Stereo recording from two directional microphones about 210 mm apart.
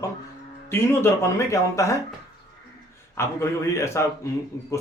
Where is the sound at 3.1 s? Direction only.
10° left (ahead or behind).